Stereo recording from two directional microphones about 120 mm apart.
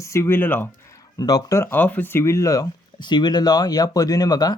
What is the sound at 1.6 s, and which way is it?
Speech, 15° left (ahead or behind).